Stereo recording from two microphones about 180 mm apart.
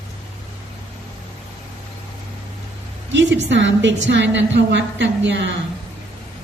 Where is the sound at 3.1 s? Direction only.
85° right.